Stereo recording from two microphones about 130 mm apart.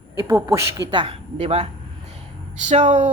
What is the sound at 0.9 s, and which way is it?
Speech, 45° right (ahead or behind).